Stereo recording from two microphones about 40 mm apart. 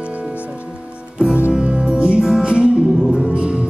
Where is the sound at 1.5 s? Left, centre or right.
Right.